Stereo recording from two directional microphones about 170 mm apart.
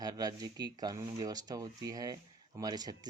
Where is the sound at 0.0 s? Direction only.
20° right (ahead or behind).